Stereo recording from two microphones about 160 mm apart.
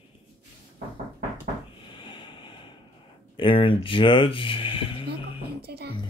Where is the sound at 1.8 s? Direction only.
30° left (ahead or behind).